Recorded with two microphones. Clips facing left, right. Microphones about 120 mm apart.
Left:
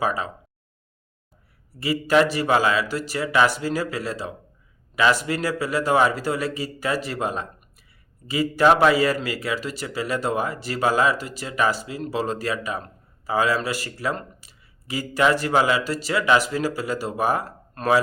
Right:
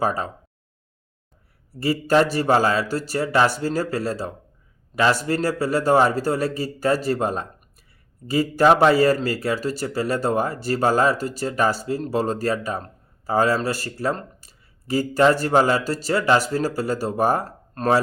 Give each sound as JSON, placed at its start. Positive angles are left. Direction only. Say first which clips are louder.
{"t": 0.0, "sound": "speech", "louder": "right 2 dB", "side_deg": -35}
{"t": 1.8, "sound": "speech", "louder": "right 1 dB", "side_deg": -35}